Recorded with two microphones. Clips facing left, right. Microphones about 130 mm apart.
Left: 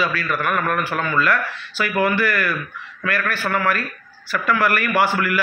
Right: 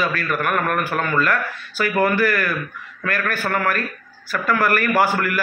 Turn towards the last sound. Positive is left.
turn(degrees=-45)  # may be behind; listen again after turning